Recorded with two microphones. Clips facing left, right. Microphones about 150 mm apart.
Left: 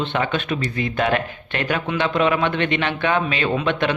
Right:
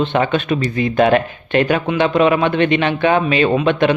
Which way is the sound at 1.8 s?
20° right (ahead or behind).